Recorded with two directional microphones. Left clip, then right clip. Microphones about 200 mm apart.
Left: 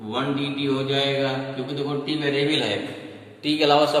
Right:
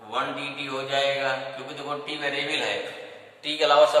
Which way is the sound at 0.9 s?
10° left (ahead or behind).